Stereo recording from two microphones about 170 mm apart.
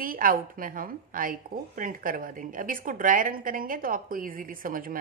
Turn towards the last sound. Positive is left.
turn(degrees=-55)  # may be behind; listen again after turning